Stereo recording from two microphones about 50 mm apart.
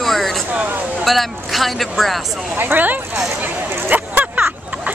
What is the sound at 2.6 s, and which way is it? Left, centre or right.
Speech, right.